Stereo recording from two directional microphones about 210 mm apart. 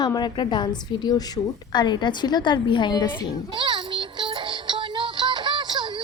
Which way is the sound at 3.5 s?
20° right (ahead or behind).